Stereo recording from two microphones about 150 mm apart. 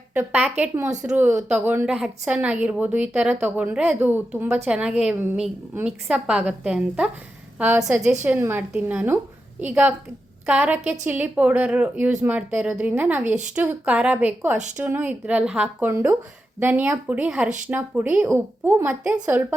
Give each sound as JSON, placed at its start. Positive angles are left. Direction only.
{"t": 0.1, "sound": "a woman's voice", "side_deg": -10}